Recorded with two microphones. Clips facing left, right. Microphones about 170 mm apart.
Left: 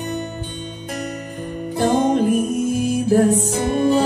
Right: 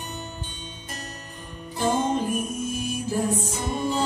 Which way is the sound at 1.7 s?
65° left (ahead or behind).